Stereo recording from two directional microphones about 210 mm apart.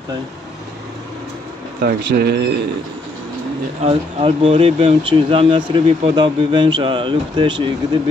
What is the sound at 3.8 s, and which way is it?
Speech, 30° right (ahead or behind).